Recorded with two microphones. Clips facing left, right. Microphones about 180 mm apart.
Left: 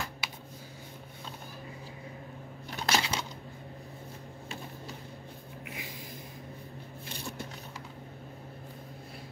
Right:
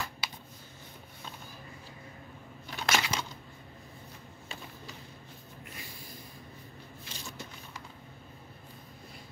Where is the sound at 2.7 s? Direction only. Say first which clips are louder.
Left 1 dB; 30° left (ahead or behind).